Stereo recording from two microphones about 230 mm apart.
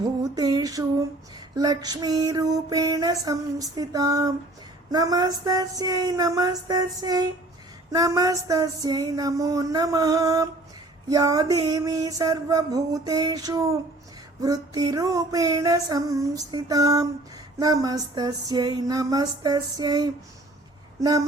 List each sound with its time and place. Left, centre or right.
0.3 s female singing: centre